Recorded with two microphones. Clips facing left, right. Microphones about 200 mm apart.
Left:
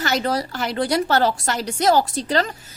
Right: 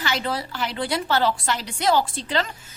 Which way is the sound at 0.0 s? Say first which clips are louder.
Left 5 dB; 45° left (ahead or behind).